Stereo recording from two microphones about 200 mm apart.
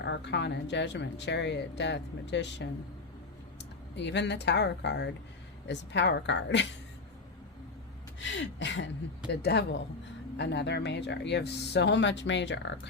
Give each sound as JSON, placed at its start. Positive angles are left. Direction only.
{"t": 0.0, "sound": "speech", "side_deg": 60}
{"t": 8.2, "sound": "speech", "side_deg": 65}